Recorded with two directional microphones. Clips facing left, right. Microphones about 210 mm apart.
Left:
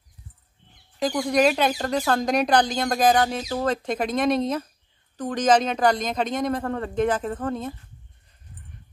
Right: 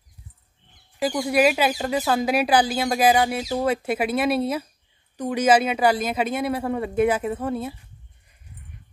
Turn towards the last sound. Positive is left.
turn(degrees=-10)  # may be behind; listen again after turning